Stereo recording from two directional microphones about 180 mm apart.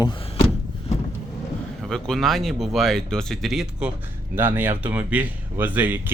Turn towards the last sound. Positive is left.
turn(degrees=-10)  # may be behind; listen again after turning